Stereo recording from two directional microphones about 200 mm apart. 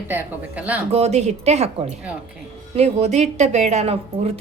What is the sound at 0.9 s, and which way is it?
A woman's voice, 30° right (ahead or behind).